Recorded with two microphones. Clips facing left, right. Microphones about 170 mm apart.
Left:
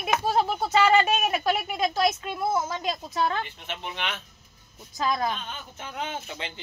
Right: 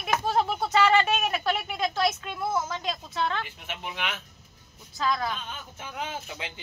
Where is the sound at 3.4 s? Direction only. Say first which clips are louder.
Left 2 dB; 5° right (ahead or behind).